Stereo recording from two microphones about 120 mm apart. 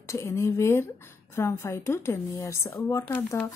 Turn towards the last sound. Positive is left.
turn(degrees=20)  # may be behind; listen again after turning